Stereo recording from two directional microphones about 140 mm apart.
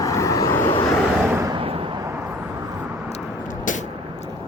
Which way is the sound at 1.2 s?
15° right (ahead or behind).